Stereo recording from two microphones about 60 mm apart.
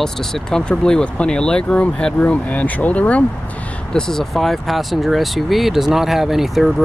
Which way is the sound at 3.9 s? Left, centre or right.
Centre.